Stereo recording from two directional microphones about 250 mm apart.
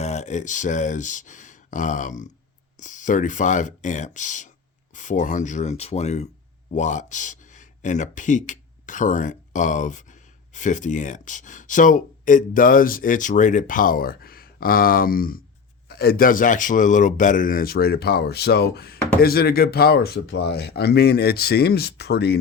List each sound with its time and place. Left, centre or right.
0.0 s speech: left